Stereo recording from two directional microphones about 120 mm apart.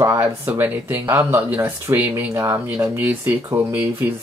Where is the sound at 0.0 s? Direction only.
20° right (ahead or behind).